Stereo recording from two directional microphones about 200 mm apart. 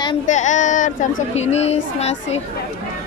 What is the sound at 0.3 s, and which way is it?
Speech, 35° left (ahead or behind).